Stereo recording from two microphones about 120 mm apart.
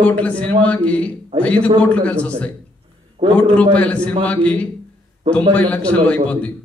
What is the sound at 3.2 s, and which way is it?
Speech, 55° right (ahead or behind).